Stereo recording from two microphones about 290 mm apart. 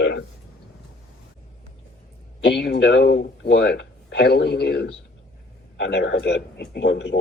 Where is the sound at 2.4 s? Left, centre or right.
Left.